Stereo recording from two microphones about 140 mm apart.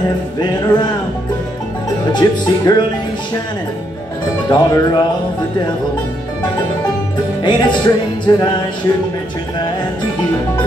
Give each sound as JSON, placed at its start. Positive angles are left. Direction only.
{"t": 0.4, "sound": "music", "side_deg": 30}
{"t": 2.1, "sound": "music", "side_deg": 30}
{"t": 4.5, "sound": "music", "side_deg": 35}
{"t": 7.4, "sound": "music", "side_deg": 35}